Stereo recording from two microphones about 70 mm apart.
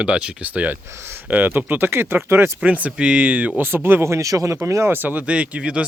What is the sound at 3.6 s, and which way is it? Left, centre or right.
Speech, right.